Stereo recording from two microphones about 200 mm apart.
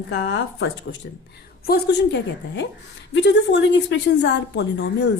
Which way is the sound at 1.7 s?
55° left (ahead or behind).